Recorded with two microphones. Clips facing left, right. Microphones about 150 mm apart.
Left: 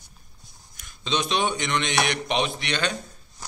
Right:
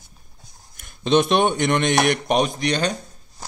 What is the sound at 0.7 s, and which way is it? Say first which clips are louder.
Speech: right 10 dB; 55° right (ahead or behind).